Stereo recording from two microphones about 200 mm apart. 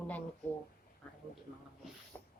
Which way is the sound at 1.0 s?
10° left (ahead or behind).